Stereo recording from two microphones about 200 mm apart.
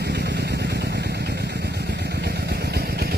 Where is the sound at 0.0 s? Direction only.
55° right (ahead or behind).